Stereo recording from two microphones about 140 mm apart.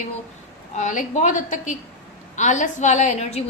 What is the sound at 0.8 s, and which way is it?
A woman's voice, 60° left (ahead or behind).